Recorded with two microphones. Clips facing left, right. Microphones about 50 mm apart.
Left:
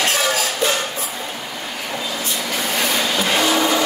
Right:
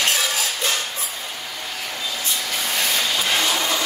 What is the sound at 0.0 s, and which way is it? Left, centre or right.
Music, centre.